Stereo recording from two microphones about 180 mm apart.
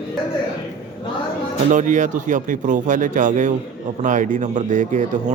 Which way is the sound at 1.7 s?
45° right (ahead or behind).